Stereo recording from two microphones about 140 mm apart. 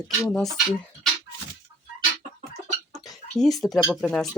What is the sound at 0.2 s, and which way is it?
Speech, 10° left (ahead or behind).